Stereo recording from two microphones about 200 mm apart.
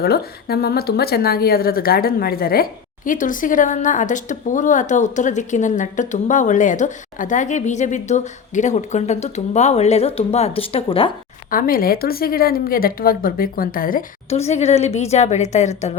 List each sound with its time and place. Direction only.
0.0 s a woman's voice: 50° left (ahead or behind); by 11.1 s 25° left (ahead or behind)
11.5 s speech: 45° left (ahead or behind)
14.3 s a woman's voice: 30° left (ahead or behind)